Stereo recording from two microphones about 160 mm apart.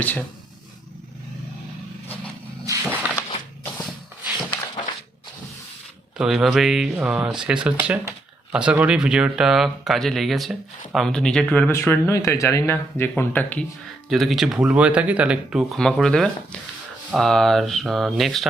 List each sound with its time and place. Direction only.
0.0 s speech: 10° left (ahead or behind)
3.2 s a sound: 20° left (ahead or behind)
6.1 s speech: centre (ahead or behind)
14.1 s speech: centre (ahead or behind)